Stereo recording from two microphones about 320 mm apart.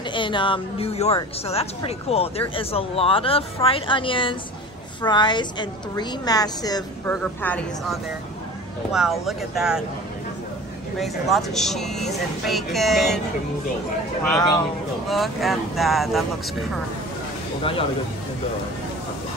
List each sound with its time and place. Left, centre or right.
0.1 s a woman's voice: centre
11.0 s speech: centre
14.2 s a woman's voice: centre